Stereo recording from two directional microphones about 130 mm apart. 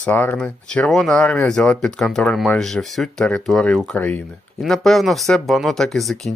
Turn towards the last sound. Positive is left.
turn(degrees=0)  # may be behind; listen again after turning